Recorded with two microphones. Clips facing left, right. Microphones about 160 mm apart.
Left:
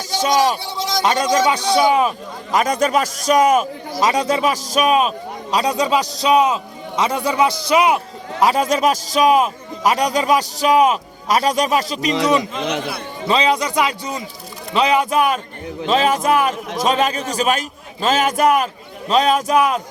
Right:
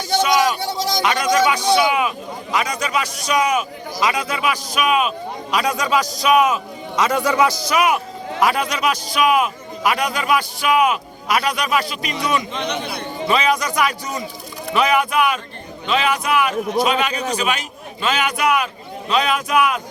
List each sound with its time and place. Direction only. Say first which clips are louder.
0.2 s a man's voice: left 2 dB; 40° left (ahead or behind)